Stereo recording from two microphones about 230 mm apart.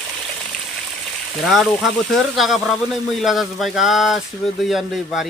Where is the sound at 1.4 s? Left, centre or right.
Centre.